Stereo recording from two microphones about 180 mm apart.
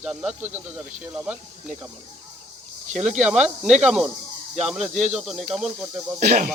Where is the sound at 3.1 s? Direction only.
5° right (ahead or behind).